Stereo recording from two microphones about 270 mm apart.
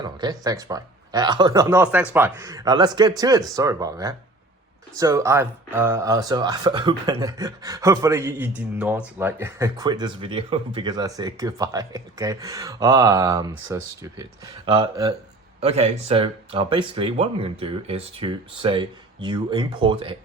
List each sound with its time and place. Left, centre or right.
0.0 s speech: centre